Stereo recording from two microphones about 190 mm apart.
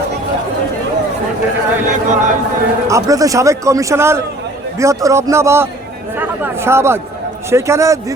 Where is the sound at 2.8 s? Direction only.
15° right (ahead or behind).